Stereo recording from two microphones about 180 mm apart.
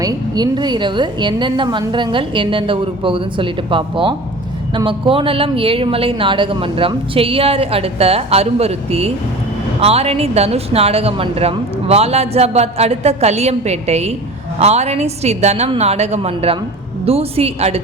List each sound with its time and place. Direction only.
0.0 s a woman's voice: 20° right (ahead or behind)